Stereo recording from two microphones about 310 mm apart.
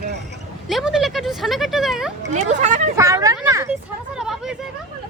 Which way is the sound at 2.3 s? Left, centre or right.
Right.